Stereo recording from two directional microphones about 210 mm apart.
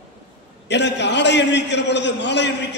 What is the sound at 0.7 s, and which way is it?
A man's voice, 55° left (ahead or behind).